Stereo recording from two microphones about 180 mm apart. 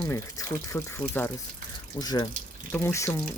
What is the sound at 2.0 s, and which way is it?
Speech, 20° left (ahead or behind).